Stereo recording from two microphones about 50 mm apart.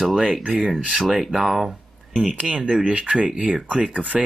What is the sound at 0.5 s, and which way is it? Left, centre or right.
Speech, centre.